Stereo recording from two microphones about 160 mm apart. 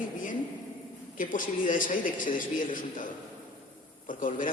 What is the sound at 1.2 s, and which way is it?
A man's voice, 55° left (ahead or behind).